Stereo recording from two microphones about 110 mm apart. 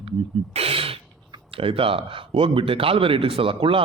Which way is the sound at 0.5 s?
60° right (ahead or behind).